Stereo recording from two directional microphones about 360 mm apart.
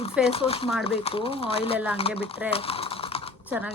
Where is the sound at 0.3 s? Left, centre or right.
Centre.